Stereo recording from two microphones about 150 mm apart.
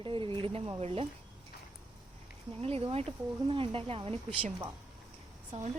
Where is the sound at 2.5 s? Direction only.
40° right (ahead or behind).